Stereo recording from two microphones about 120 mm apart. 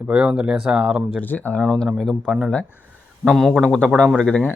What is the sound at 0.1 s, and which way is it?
Speech, 10° right (ahead or behind).